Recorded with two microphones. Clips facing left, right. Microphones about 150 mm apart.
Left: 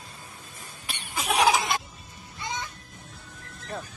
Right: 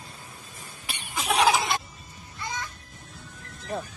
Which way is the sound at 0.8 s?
Centre (ahead or behind).